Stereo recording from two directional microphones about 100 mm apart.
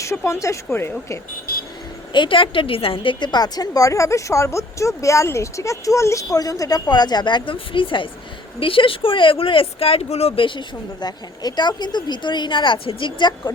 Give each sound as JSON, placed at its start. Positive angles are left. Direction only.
{"t": 0.0, "sound": "speech", "side_deg": 30}
{"t": 2.1, "sound": "a woman's voice", "side_deg": 55}
{"t": 11.0, "sound": "a woman's voice", "side_deg": 45}